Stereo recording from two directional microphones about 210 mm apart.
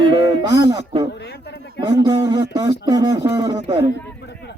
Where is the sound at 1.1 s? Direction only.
55° left (ahead or behind).